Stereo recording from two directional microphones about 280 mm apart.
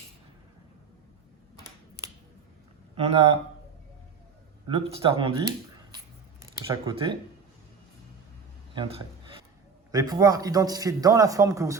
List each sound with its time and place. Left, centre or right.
2.9 s speech: right
4.7 s a man's voice: centre
8.7 s a sound: centre
9.9 s a man's voice: centre